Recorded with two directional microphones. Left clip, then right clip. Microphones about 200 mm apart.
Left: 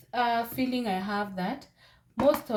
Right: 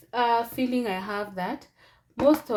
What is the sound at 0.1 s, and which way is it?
Speech, 35° right (ahead or behind).